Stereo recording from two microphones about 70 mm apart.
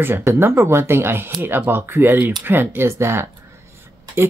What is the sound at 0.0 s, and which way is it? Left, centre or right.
Speech, right.